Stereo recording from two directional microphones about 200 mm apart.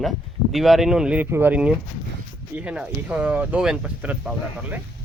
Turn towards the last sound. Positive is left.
turn(degrees=-10)  # may be behind; listen again after turning